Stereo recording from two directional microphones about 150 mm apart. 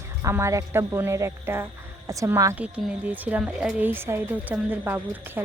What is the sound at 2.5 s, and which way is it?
A woman's voice, 10° right (ahead or behind).